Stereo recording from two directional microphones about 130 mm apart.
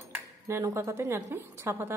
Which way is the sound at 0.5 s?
20° right (ahead or behind).